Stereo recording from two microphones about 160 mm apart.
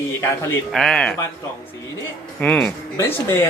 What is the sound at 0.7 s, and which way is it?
Speech, 5° left (ahead or behind).